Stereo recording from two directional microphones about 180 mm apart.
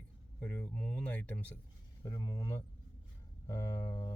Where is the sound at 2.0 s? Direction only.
20° left (ahead or behind).